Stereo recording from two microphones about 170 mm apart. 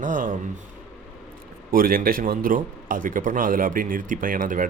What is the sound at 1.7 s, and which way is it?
A man's voice, 60° right (ahead or behind).